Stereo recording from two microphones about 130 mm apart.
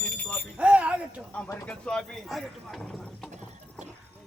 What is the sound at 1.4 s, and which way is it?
Speech, 15° left (ahead or behind).